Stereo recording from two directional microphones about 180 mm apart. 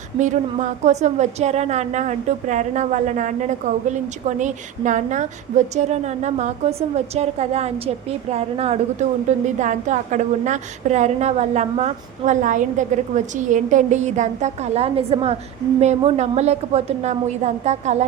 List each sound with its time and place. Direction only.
0.2 s a woman's voice: 40° right (ahead or behind)